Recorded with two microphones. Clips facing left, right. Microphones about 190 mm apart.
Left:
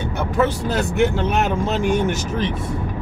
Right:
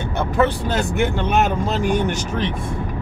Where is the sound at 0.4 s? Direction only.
Centre (ahead or behind).